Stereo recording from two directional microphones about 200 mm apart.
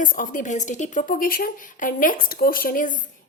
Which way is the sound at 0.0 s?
40° left (ahead or behind).